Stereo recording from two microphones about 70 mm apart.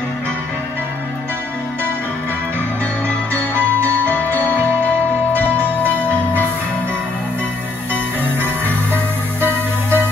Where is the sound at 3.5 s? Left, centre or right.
Right.